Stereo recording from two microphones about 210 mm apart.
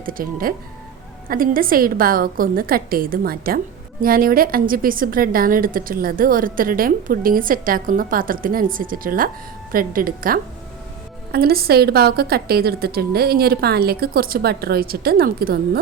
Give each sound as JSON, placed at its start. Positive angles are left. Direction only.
{"t": 0.0, "sound": "a woman's voice", "side_deg": -40}